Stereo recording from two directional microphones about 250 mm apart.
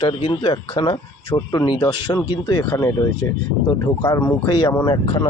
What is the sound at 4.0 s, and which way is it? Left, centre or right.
Speech, centre.